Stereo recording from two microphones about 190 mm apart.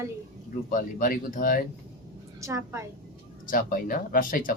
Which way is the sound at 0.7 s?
45° left (ahead or behind).